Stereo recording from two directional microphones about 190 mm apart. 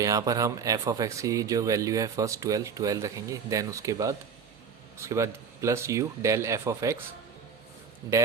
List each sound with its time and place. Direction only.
0.0 s speech: 15° right (ahead or behind)